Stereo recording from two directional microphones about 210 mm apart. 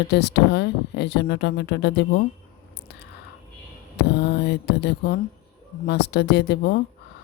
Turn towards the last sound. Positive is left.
turn(degrees=50)  # may be behind; listen again after turning